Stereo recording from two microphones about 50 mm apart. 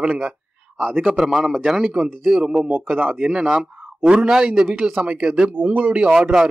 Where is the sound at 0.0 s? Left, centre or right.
Right.